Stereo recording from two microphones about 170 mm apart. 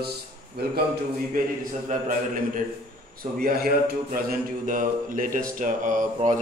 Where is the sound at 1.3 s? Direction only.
55° right (ahead or behind).